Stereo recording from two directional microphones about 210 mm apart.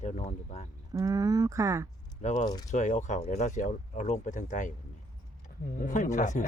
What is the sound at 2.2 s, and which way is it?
Speech, 35° left (ahead or behind).